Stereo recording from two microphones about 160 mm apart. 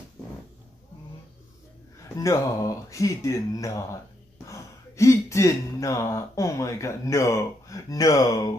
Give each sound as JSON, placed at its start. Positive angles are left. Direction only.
{"t": 2.1, "sound": "speech", "side_deg": 20}